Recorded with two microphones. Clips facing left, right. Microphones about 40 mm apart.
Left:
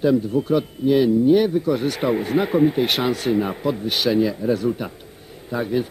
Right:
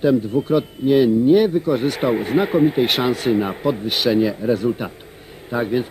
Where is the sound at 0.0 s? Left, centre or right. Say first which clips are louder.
Right 1 dB; right.